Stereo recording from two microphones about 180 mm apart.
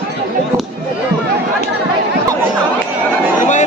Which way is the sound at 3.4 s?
45° left (ahead or behind).